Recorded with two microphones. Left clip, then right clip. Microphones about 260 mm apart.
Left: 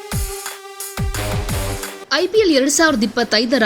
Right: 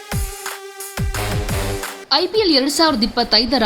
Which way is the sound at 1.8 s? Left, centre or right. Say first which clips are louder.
Right 1 dB; centre.